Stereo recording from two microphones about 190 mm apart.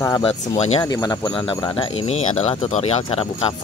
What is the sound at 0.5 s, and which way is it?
Speech, 35° left (ahead or behind).